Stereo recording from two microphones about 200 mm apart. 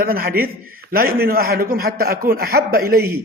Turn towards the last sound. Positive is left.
turn(degrees=-50)  # may be behind; listen again after turning